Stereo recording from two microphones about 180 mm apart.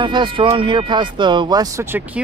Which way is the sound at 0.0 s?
25° right (ahead or behind).